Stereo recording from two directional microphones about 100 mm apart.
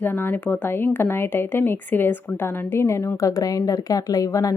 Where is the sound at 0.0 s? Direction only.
20° left (ahead or behind).